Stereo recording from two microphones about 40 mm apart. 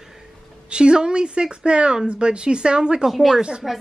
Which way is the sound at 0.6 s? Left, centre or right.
Right.